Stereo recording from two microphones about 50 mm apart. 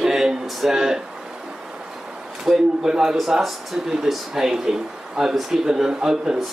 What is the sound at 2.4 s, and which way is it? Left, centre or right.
Speech, centre.